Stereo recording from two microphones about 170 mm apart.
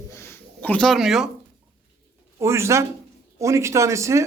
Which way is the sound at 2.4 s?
15° right (ahead or behind).